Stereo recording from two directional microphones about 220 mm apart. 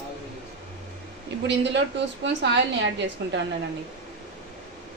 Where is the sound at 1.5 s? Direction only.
55° right (ahead or behind).